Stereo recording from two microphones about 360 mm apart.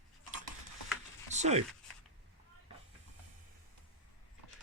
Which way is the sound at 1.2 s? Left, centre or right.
Centre.